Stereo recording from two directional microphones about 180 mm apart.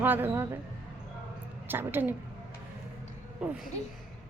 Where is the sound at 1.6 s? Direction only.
10° right (ahead or behind).